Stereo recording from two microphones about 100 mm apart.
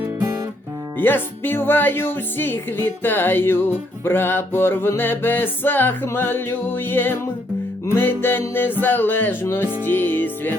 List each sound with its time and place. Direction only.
0.9 s speech: 20° left (ahead or behind)